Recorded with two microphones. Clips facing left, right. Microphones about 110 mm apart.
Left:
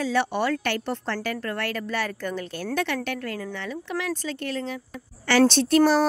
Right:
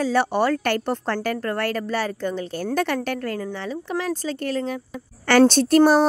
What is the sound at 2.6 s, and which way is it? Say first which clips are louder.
Speech: right 4 dB; 40° right (ahead or behind).